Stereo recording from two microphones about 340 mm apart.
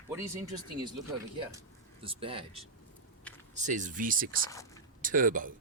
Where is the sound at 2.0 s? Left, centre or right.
Centre.